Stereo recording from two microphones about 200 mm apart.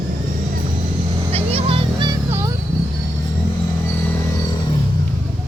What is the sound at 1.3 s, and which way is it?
Children playing, 30° right (ahead or behind).